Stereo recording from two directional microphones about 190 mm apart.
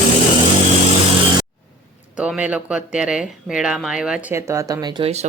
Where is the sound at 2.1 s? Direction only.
5° right (ahead or behind); by 5.1 s 25° right (ahead or behind).